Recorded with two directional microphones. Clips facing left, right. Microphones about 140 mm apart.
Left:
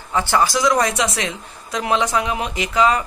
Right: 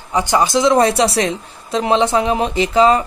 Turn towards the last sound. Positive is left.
turn(degrees=-30)  # may be behind; listen again after turning